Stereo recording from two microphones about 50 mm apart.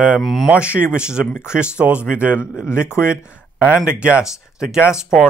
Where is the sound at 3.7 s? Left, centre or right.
Right.